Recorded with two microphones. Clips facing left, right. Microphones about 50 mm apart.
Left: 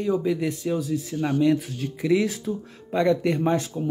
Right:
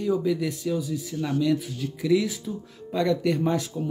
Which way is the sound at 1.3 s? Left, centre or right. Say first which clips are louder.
Left 3 dB; left.